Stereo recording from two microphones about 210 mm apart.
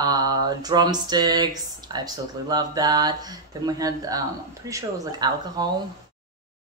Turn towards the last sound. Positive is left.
turn(degrees=-20)  # may be behind; listen again after turning